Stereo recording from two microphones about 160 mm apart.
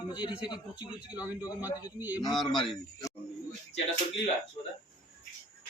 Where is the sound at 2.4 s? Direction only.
30° left (ahead or behind).